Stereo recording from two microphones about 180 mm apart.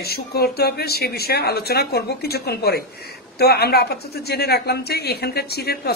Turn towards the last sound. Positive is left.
turn(degrees=60)  # may be behind; listen again after turning